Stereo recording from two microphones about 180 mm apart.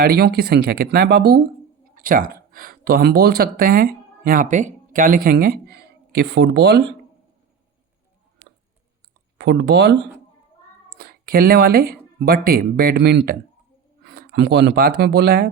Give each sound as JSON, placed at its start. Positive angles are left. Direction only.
{"t": 0.0, "sound": "speech", "side_deg": -60}
{"t": 2.0, "sound": "speech", "side_deg": -50}
{"t": 9.4, "sound": "speech", "side_deg": -65}